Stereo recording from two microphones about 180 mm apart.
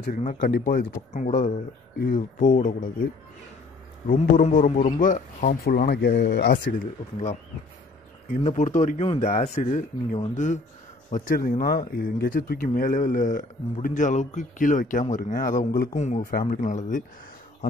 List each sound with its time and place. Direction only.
0.0 s speech: 45° left (ahead or behind)
4.1 s speech: 50° left (ahead or behind); by 6.6 s 65° left (ahead or behind)
8.4 s speech: 40° left (ahead or behind)